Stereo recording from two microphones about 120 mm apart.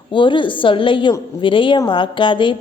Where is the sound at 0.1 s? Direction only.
45° left (ahead or behind).